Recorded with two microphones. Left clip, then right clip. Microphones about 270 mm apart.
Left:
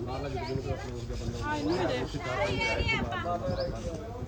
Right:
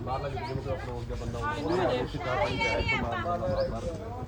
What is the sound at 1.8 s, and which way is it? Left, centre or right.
Speech, left.